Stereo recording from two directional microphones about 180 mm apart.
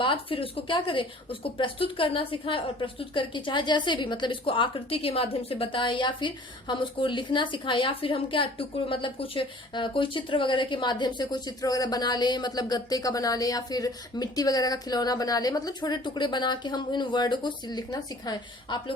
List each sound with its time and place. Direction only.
0.0 s a woman's voice: 30° left (ahead or behind)